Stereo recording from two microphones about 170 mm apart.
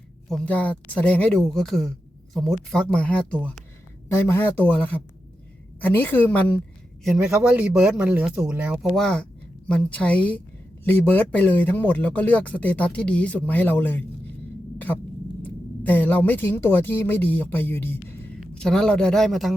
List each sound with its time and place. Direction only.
0.3 s a man's voice: 5° left (ahead or behind)
7.0 s a man's voice: centre (ahead or behind)
15.4 s a woman's voice: 10° left (ahead or behind)